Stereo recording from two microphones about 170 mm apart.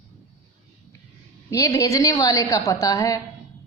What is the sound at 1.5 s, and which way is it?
A woman's voice, 20° left (ahead or behind).